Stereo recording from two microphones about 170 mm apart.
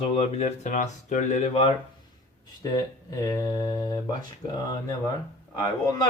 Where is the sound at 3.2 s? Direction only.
20° left (ahead or behind).